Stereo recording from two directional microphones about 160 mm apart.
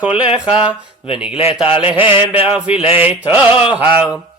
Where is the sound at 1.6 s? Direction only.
35° left (ahead or behind).